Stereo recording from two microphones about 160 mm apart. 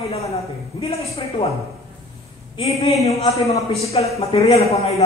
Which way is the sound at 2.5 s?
40° left (ahead or behind).